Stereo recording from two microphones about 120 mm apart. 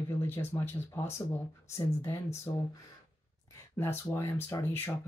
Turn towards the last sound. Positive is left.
turn(degrees=15)  # may be behind; listen again after turning